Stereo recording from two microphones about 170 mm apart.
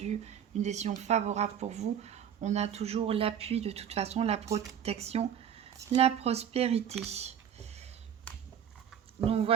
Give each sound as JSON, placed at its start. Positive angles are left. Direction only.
{"t": 0.0, "sound": "a woman's voice", "side_deg": -40}
{"t": 9.2, "sound": "a woman's voice", "side_deg": -35}